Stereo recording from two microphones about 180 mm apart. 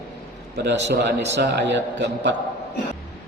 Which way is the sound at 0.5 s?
75° right (ahead or behind).